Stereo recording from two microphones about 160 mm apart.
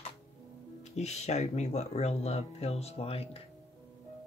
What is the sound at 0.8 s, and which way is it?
Speech, 45° left (ahead or behind).